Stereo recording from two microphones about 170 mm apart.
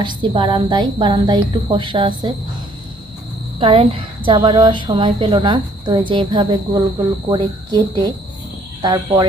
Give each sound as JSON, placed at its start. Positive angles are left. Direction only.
{"t": 0.0, "sound": "speech", "side_deg": -30}
{"t": 3.6, "sound": "speech", "side_deg": -35}